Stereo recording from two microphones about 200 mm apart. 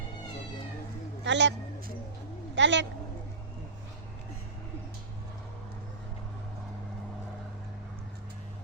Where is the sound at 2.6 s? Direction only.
65° right (ahead or behind).